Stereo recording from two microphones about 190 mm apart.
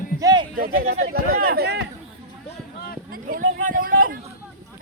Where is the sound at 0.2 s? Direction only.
20° right (ahead or behind).